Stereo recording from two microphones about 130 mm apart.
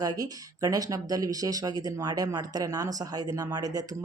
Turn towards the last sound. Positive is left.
turn(degrees=-30)  # may be behind; listen again after turning